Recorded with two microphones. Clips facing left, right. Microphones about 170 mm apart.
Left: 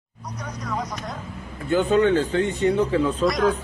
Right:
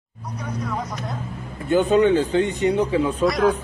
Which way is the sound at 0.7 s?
5° right (ahead or behind).